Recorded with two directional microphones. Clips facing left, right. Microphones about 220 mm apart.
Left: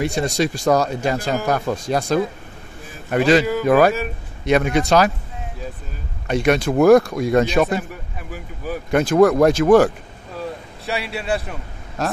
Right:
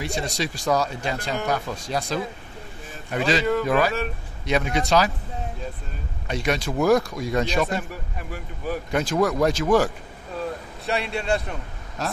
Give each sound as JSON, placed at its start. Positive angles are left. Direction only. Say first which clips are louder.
{"t": 0.0, "sound": "speech", "louder": "left 7 dB", "side_deg": 50}
{"t": 6.2, "sound": "speech", "louder": "left 8 dB", "side_deg": 55}
{"t": 8.2, "sound": "a man's voice", "louder": "left 2 dB", "side_deg": 0}
{"t": 8.9, "sound": "speech", "louder": "left 9 dB", "side_deg": 55}
{"t": 10.9, "sound": "a man's voice", "louder": "left 1 dB", "side_deg": 5}